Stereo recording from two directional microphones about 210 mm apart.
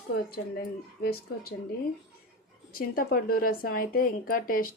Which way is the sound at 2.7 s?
45° left (ahead or behind).